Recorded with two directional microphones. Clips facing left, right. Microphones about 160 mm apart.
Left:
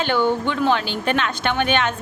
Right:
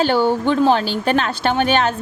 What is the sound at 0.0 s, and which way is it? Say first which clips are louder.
Speech: right 3 dB; 35° right (ahead or behind).